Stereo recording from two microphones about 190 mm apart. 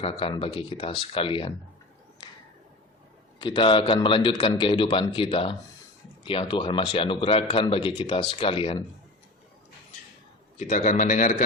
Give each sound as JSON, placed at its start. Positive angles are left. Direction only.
{"t": 0.0, "sound": "a man's voice", "side_deg": 30}
{"t": 3.3, "sound": "a man's voice", "side_deg": 25}
{"t": 10.6, "sound": "a man's voice", "side_deg": 40}